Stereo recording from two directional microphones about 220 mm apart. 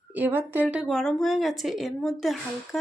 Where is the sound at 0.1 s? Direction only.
10° right (ahead or behind).